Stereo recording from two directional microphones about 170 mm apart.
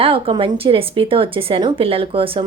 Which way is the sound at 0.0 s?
30° right (ahead or behind).